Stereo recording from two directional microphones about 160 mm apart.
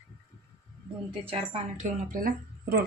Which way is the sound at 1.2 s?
40° right (ahead or behind).